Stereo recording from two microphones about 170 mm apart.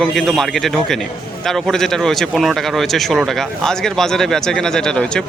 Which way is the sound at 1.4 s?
Centre (ahead or behind).